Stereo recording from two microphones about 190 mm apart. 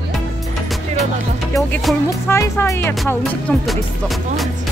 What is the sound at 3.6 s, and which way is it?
Music, centre (ahead or behind).